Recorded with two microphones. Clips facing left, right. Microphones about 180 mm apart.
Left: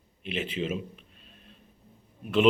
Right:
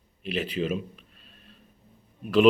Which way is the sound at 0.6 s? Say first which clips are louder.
Right 3 dB; 25° left (ahead or behind).